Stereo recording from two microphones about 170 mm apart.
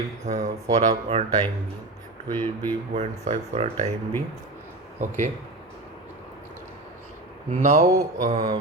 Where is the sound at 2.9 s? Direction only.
40° right (ahead or behind).